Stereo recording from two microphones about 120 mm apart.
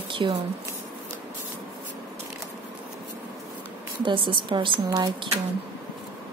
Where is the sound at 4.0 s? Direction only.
45° right (ahead or behind).